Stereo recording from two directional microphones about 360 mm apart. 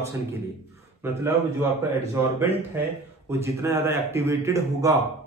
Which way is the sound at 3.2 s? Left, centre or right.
Centre.